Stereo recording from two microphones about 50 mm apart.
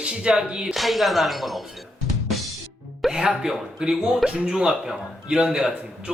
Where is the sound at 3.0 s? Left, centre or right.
Centre.